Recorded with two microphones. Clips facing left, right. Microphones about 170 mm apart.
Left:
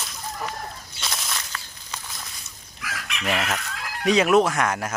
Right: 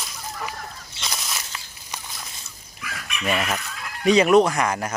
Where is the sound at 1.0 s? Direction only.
Centre (ahead or behind).